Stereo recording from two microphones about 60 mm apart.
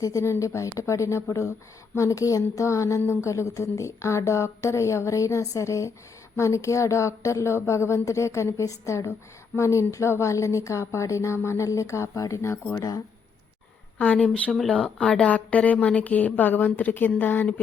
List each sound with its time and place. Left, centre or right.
0.0 s speech: left
0.3 s speech: left
14.0 s a woman's voice: left
14.5 s speech: centre
15.2 s a woman's voice: left